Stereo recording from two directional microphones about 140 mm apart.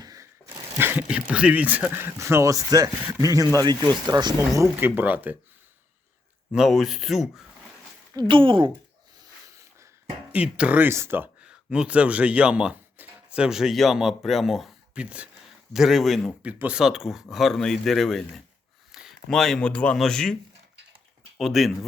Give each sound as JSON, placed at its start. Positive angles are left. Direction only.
{"t": 0.0, "sound": "a sound", "side_deg": -25}
{"t": 0.8, "sound": "speech", "side_deg": -15}
{"t": 6.5, "sound": "speech", "side_deg": -5}
{"t": 8.1, "sound": "a woman's voice", "side_deg": -35}
{"t": 10.3, "sound": "speech", "side_deg": -10}
{"t": 21.3, "sound": "speech", "side_deg": 0}